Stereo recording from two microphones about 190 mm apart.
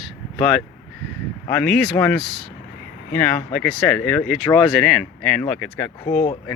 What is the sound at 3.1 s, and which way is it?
Speech, 10° left (ahead or behind).